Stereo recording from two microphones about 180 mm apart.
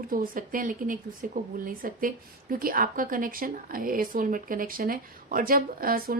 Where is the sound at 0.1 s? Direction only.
50° right (ahead or behind).